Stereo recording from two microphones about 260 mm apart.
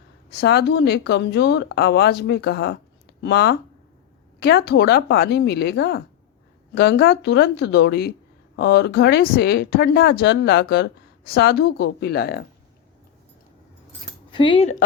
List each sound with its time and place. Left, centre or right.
0.3 s a woman's voice: left
14.3 s speech: centre